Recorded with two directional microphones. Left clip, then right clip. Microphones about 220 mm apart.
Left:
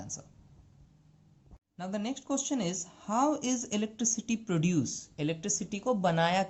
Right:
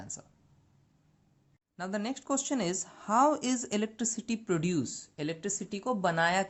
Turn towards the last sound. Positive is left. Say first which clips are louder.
# even
turn(degrees=-40)  # may be behind; listen again after turning